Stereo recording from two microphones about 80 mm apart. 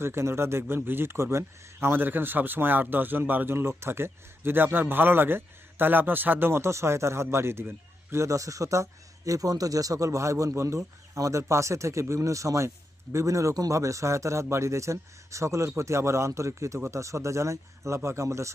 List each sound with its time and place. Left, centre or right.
0.0 s a man's voice: right